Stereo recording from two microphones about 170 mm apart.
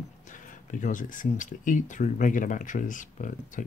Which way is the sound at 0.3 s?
50° left (ahead or behind).